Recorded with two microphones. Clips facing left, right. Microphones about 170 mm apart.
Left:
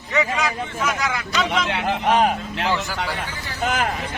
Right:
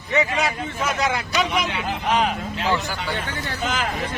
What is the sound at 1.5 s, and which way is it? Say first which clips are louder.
Speech: left 2 dB; 60° left (ahead or behind).